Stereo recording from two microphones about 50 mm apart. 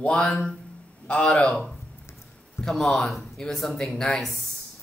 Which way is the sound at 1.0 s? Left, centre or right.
Left.